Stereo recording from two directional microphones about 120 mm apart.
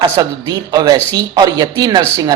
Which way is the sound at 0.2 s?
35° right (ahead or behind).